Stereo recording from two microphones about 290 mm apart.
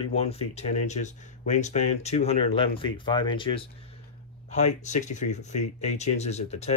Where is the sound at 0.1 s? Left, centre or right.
Left.